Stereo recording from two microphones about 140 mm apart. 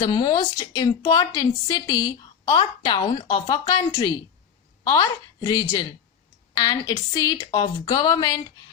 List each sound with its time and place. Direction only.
0.0 s a woman's voice: 30° left (ahead or behind)